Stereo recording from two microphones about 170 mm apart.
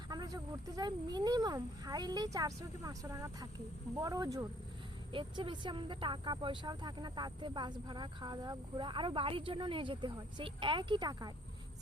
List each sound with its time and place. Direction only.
0.1 s speech: 20° right (ahead or behind)